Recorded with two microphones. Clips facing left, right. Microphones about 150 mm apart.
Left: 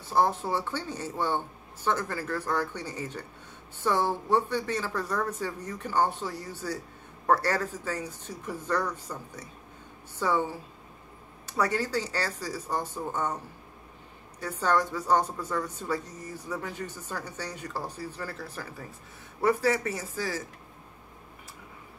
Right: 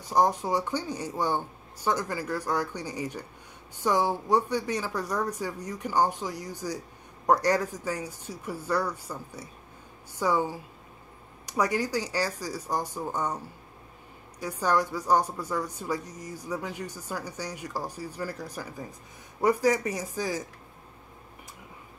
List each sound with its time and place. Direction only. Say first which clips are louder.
0.0 s a woman's voice: right 1 dB; 15° right (ahead or behind)
14.4 s a woman's voice: even; 10° right (ahead or behind)